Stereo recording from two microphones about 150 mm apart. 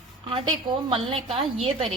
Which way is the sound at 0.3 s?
35° right (ahead or behind).